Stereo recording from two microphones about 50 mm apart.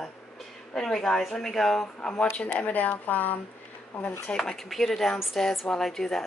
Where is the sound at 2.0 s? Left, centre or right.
Centre.